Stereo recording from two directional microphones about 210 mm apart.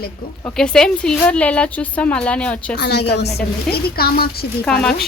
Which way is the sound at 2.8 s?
50° left (ahead or behind).